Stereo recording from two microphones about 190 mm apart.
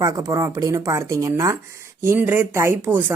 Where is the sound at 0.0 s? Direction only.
20° right (ahead or behind).